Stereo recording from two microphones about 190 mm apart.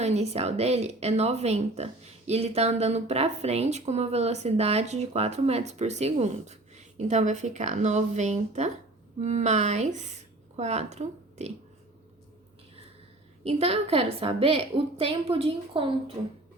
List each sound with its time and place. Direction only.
0.0 s a woman's voice: 35° right (ahead or behind)
13.4 s a woman's voice: 30° right (ahead or behind)